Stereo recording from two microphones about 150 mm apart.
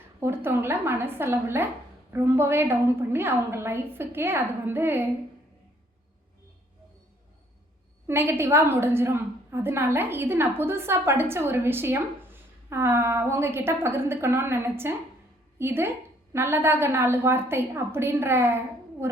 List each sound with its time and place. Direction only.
0.2 s a woman's voice: 15° right (ahead or behind)
8.0 s a woman's voice: 15° right (ahead or behind)